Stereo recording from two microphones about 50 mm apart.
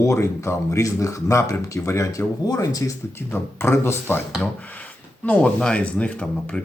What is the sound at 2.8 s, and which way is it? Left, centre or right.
Speech, left.